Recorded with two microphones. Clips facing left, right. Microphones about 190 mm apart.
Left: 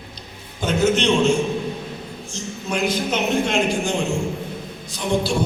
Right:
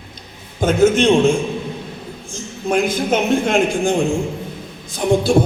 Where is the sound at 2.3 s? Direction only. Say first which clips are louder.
Right 7 dB; 50° right (ahead or behind).